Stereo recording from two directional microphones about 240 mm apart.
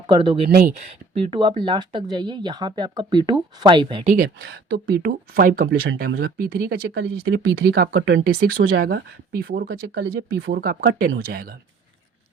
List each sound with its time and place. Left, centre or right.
0.1 s speech: centre
4.1 s speech: right